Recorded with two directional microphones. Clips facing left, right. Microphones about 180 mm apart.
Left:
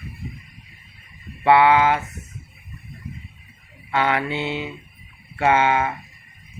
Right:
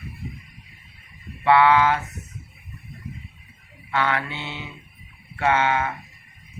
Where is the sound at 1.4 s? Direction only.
15° left (ahead or behind).